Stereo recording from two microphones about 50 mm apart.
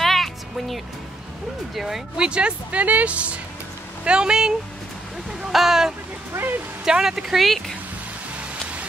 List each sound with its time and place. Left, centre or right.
0.0 s music: centre
1.8 s speech: centre
2.1 s speech: centre
6.3 s speech: right
6.8 s speech: centre